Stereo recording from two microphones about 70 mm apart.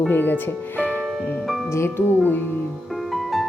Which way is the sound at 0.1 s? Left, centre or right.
Left.